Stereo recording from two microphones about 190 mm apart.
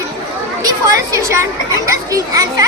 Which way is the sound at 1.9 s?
15° right (ahead or behind).